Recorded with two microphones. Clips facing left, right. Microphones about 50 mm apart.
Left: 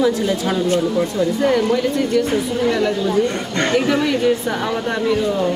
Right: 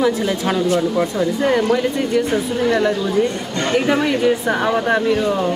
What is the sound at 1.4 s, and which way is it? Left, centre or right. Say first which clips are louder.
Speech: right 1 dB; centre.